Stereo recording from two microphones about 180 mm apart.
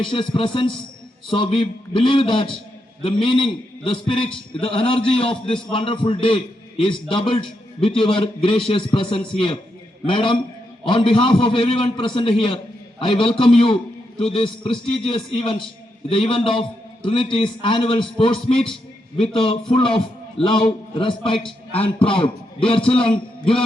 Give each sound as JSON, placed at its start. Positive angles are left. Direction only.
{"t": 0.0, "sound": "a man's voice", "side_deg": 25}